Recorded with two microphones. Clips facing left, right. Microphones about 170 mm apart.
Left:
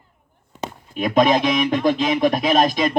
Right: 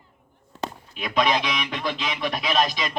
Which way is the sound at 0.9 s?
45° left (ahead or behind).